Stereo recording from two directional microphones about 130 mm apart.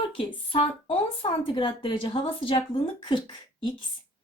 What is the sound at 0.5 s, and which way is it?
A woman's voice, 45° left (ahead or behind).